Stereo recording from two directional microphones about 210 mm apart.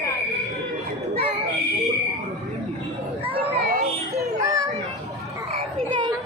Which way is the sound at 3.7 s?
45° right (ahead or behind).